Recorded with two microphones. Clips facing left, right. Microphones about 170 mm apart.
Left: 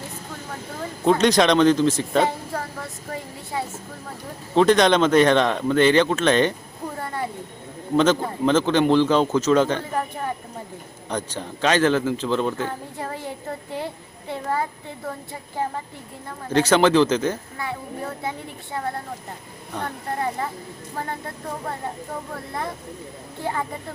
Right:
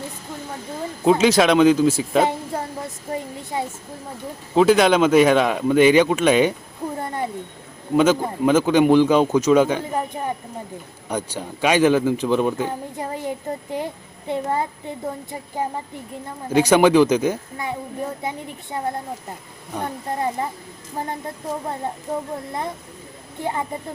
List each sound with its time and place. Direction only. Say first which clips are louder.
1.0 s speech: right 2 dB; 5° right (ahead or behind)
2.2 s a woman's voice: right 2 dB; 20° right (ahead or behind)
4.5 s speech: right 1 dB; 5° right (ahead or behind)
7.0 s a sound: right 1 dB; 20° right (ahead or behind)
7.9 s speech: right 2 dB; 10° right (ahead or behind)
20.9 s speech: right 2 dB; 20° right (ahead or behind)
23.4 s speech: right 2 dB; 20° right (ahead or behind)